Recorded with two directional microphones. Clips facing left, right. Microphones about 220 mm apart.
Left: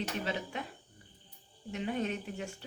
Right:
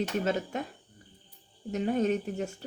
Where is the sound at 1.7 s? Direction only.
40° right (ahead or behind).